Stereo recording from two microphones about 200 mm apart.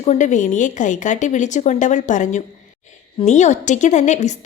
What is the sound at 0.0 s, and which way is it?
A woman's voice, 35° left (ahead or behind).